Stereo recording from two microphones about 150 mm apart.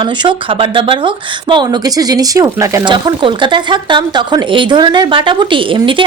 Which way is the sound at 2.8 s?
30° right (ahead or behind).